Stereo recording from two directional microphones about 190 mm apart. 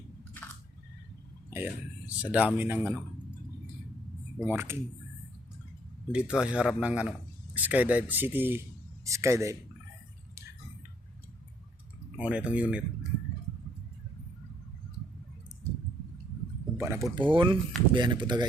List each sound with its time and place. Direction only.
1.5 s speech: 10° right (ahead or behind)
4.4 s speech: 15° right (ahead or behind)
6.1 s a man's voice: 5° right (ahead or behind)
12.2 s speech: 5° right (ahead or behind)
16.7 s a sound: 15° right (ahead or behind)
17.2 s speech: 25° right (ahead or behind)